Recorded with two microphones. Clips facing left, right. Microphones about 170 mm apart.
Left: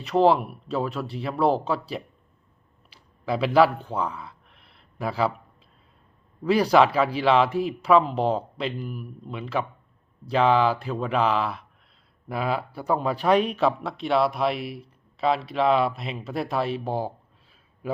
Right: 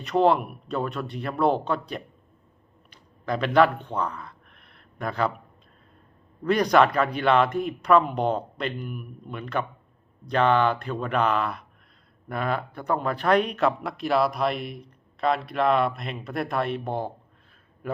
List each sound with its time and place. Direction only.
0.0 s speech: 5° left (ahead or behind)
2.9 s a sound: 5° left (ahead or behind)
6.4 s a man's voice: 5° left (ahead or behind)